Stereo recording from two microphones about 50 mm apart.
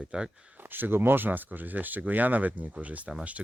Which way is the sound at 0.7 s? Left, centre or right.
Right.